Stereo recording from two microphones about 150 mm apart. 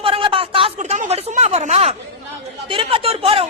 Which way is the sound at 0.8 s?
50° right (ahead or behind).